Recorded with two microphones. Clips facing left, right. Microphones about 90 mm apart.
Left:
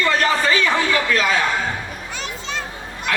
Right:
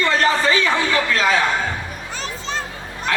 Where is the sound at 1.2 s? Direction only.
35° right (ahead or behind).